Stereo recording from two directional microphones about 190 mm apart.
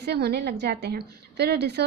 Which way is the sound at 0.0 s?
60° right (ahead or behind).